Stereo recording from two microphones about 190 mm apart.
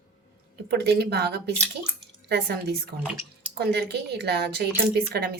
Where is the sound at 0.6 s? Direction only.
60° right (ahead or behind).